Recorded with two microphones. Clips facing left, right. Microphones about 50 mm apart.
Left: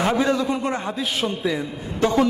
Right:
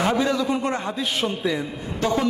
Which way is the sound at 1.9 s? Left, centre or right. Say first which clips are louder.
Left 3 dB; left.